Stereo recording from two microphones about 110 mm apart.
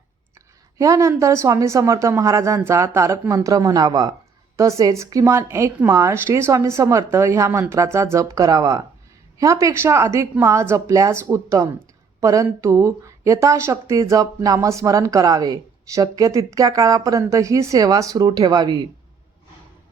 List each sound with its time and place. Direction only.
0.8 s speech: 30° right (ahead or behind)